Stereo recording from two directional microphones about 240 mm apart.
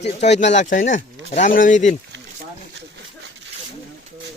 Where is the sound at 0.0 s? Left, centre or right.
Left.